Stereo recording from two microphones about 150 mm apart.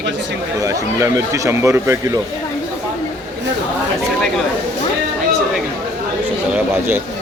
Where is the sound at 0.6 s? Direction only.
20° right (ahead or behind).